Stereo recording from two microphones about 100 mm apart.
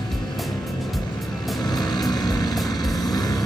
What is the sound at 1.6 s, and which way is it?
Vehicle, 45° left (ahead or behind).